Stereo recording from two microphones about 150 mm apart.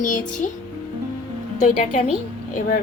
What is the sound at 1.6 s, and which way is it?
Speech, 55° left (ahead or behind).